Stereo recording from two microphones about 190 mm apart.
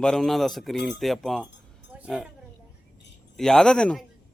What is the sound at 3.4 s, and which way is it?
Speech, centre (ahead or behind).